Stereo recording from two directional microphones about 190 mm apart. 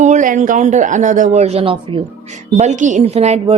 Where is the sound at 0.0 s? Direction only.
40° right (ahead or behind).